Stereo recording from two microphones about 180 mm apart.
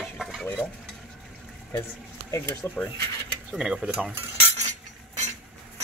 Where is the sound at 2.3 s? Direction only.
15° left (ahead or behind).